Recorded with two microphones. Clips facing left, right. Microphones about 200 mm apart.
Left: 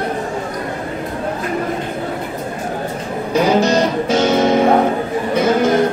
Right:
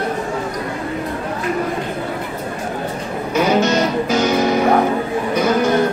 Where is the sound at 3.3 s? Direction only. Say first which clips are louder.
Left 2 dB; 35° left (ahead or behind).